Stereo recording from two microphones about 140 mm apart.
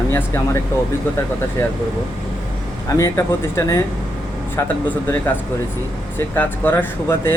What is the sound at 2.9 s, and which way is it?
Speech, 20° left (ahead or behind).